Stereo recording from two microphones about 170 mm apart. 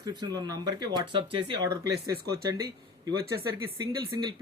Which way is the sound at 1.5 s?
70° right (ahead or behind).